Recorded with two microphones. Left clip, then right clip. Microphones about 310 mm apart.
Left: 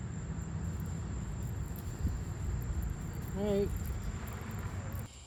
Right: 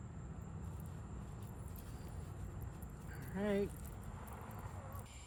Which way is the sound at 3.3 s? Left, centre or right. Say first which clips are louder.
Left 5 dB; right.